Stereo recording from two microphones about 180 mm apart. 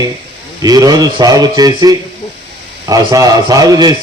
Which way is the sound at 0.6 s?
20° right (ahead or behind).